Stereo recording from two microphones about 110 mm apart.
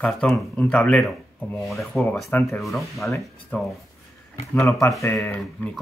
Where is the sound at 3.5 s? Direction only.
15° left (ahead or behind).